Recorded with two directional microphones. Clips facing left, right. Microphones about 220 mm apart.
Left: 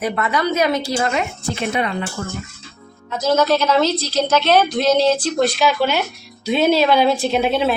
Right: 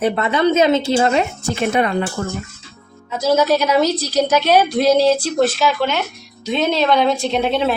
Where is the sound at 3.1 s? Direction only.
5° right (ahead or behind).